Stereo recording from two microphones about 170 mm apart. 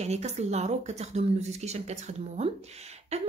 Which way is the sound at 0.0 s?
40° right (ahead or behind).